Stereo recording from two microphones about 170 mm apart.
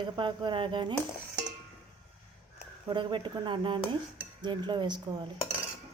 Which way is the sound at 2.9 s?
30° right (ahead or behind).